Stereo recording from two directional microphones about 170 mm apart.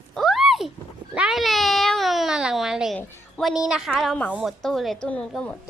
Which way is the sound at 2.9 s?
15° left (ahead or behind).